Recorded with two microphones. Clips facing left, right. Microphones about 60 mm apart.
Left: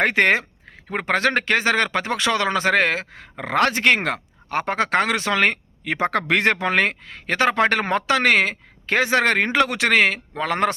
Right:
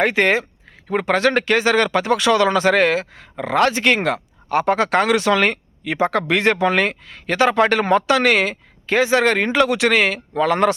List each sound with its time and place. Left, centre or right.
0.0 s speech: left